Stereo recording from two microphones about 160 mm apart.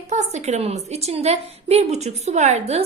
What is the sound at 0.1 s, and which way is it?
A woman's voice, 45° right (ahead or behind).